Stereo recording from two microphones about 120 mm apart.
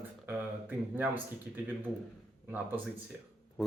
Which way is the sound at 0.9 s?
15° right (ahead or behind).